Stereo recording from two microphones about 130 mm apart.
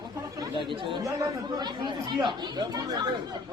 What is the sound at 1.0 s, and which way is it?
Speech, 30° right (ahead or behind).